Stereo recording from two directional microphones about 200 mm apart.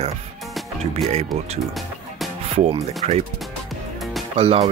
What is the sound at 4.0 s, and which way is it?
Music, centre (ahead or behind).